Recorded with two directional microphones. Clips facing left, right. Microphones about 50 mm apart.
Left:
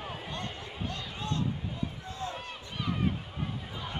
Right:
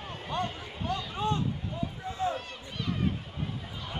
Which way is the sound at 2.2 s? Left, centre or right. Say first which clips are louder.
Right 7 dB; right.